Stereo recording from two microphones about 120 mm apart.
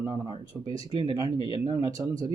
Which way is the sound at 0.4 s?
30° right (ahead or behind).